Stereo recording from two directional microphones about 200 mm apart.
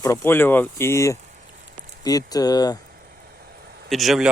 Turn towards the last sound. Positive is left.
turn(degrees=0)  # may be behind; listen again after turning